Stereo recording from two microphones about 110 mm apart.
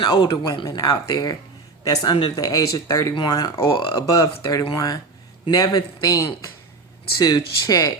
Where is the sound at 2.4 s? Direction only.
35° left (ahead or behind).